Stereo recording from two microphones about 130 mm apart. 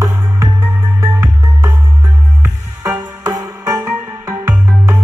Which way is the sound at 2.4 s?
20° right (ahead or behind).